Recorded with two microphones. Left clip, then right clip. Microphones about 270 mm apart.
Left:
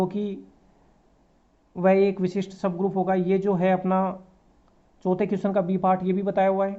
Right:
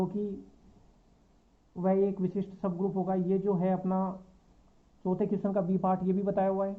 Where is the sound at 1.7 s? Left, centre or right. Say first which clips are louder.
Left 8 dB; left.